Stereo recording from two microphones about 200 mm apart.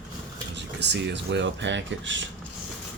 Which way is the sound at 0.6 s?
60° right (ahead or behind).